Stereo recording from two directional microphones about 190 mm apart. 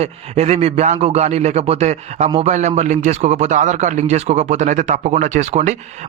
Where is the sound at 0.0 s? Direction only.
35° right (ahead or behind).